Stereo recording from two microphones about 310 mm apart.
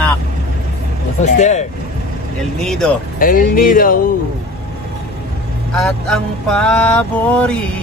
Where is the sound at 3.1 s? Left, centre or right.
Left.